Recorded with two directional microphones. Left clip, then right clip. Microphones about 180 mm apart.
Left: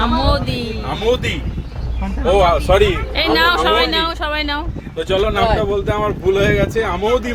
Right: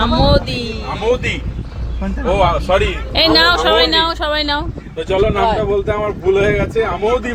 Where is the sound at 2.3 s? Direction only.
45° left (ahead or behind).